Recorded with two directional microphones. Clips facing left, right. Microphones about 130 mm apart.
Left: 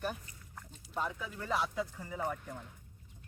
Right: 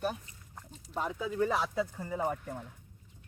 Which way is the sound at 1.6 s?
35° right (ahead or behind).